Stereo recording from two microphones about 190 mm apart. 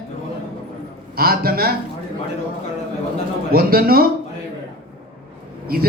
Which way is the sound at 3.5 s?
50° right (ahead or behind).